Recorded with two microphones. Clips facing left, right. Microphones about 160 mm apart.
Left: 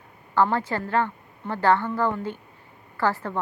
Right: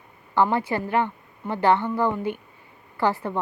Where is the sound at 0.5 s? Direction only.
15° right (ahead or behind).